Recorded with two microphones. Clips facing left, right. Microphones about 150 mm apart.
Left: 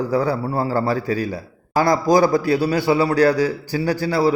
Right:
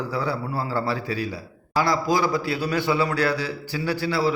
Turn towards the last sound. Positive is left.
turn(degrees=40)  # may be behind; listen again after turning